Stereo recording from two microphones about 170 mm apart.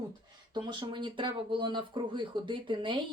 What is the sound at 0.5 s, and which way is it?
Speech, 25° right (ahead or behind).